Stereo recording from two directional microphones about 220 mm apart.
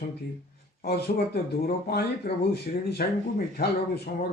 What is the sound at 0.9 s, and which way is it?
Speech, 45° left (ahead or behind).